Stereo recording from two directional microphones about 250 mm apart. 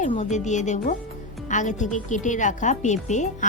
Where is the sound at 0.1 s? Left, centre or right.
Left.